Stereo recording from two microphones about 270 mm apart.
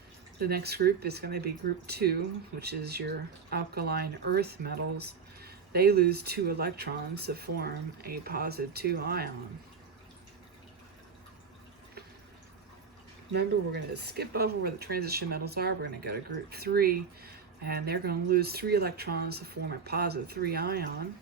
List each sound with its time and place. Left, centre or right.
0.3 s speech: right
13.3 s speech: right